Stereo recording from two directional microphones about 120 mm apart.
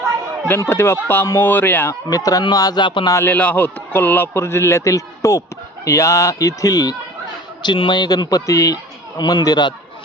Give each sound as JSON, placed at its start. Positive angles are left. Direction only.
{"t": 0.4, "sound": "a man's voice", "side_deg": 20}
{"t": 2.0, "sound": "a man's voice", "side_deg": 30}
{"t": 3.1, "sound": "a man's voice", "side_deg": 25}